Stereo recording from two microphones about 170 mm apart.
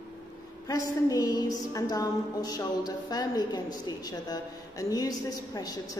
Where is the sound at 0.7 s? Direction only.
20° left (ahead or behind).